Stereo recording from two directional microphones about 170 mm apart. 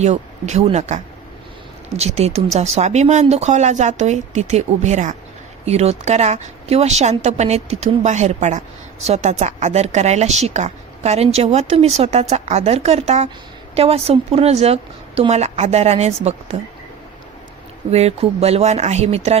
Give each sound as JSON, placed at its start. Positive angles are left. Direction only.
{"t": 0.0, "sound": "a woman's voice", "side_deg": -45}
{"t": 17.9, "sound": "a woman's voice", "side_deg": -40}